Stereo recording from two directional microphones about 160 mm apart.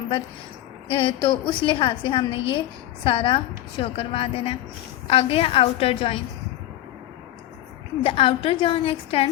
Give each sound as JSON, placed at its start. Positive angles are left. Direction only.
{"t": 0.9, "sound": "a woman's voice", "side_deg": 35}
{"t": 8.0, "sound": "a woman's voice", "side_deg": 35}